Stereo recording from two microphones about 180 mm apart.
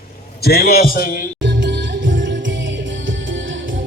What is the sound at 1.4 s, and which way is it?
Music, 85° right.